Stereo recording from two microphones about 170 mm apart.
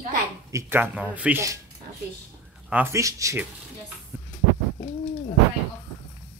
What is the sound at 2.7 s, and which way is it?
Speech, 15° right (ahead or behind).